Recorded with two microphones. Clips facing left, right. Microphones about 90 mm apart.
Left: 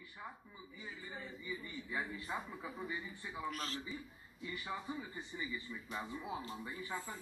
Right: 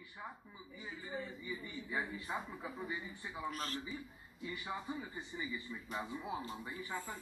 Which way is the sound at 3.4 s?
40° right (ahead or behind).